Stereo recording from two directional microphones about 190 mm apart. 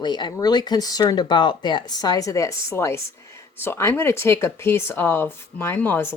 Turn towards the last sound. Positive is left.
turn(degrees=10)  # may be behind; listen again after turning